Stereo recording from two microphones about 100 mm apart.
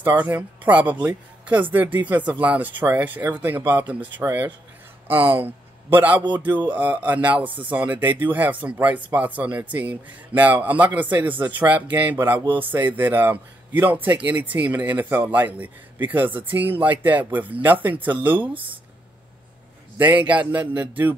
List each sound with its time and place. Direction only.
0.0 s a man's voice: 15° right (ahead or behind)
20.0 s a man's voice: 15° right (ahead or behind)